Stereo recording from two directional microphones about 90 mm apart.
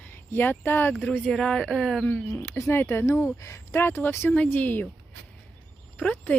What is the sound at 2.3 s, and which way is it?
Speech, 30° left (ahead or behind).